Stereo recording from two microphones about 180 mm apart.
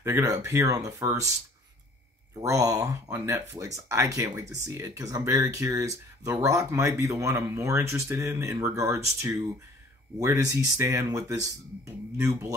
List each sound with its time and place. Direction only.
0.0 s speech: 15° right (ahead or behind)
2.3 s speech: 20° right (ahead or behind)
10.1 s speech: 15° right (ahead or behind)